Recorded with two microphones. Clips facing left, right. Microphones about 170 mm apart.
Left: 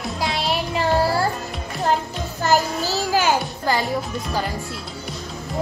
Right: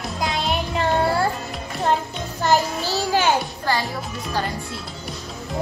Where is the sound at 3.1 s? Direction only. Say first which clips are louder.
Even; 10° left (ahead or behind).